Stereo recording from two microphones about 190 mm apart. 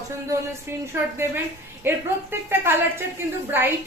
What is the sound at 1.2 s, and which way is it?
Speech, 15° right (ahead or behind).